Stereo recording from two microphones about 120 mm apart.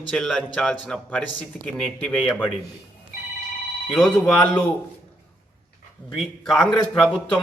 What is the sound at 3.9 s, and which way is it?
Speech, 10° left (ahead or behind).